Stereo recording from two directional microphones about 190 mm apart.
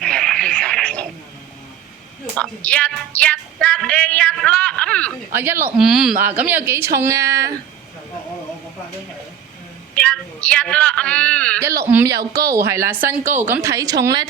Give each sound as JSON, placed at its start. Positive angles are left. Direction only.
{"t": 0.0, "sound": "radio", "side_deg": 5}
{"t": 2.3, "sound": "music", "side_deg": 5}
{"t": 5.3, "sound": "speech", "side_deg": -10}
{"t": 9.9, "sound": "a woman's voice", "side_deg": 5}
{"t": 11.9, "sound": "speech", "side_deg": -15}